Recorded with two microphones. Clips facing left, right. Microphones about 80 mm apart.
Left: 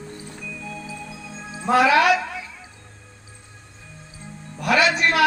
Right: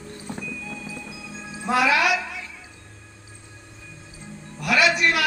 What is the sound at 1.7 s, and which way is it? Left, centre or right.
Music, left.